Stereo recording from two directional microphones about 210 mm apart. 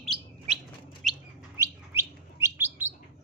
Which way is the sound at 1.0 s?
Centre (ahead or behind).